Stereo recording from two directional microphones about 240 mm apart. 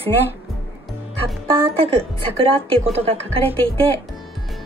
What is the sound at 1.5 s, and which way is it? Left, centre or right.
Speech, right.